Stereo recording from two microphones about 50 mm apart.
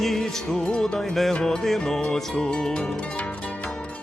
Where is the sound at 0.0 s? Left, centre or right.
Centre.